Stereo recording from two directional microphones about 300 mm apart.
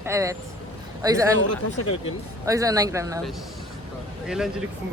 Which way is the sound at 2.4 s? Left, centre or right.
Centre.